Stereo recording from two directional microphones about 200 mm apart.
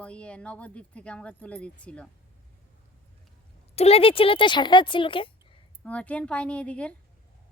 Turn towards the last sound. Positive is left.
turn(degrees=5)  # may be behind; listen again after turning